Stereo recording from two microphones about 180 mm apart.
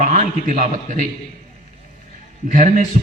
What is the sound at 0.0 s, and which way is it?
Speech, 45° right (ahead or behind).